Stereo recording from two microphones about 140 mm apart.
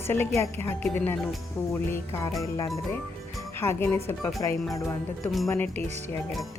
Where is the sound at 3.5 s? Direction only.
15° left (ahead or behind).